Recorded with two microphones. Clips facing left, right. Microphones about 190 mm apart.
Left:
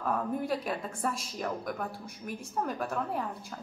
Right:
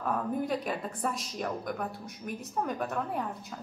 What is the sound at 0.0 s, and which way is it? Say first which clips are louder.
A woman's voice: even; centre (ahead or behind).